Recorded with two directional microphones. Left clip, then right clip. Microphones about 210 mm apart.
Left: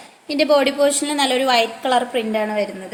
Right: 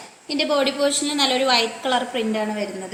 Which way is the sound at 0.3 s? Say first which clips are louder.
Left 5 dB; 55° left (ahead or behind).